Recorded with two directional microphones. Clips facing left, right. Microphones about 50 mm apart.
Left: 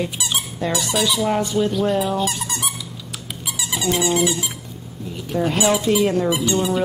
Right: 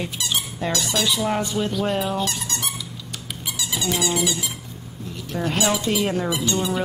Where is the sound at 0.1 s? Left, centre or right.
Centre.